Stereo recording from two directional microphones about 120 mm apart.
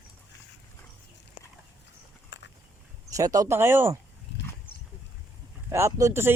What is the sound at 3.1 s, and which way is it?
Speech, 30° right (ahead or behind).